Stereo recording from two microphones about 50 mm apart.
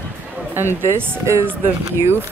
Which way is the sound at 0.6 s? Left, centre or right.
Right.